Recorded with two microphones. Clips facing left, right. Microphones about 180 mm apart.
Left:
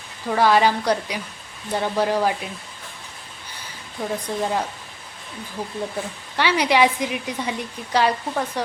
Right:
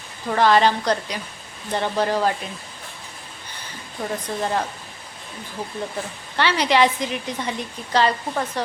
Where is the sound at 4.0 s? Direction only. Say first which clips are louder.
Left 1 dB; 10° left (ahead or behind).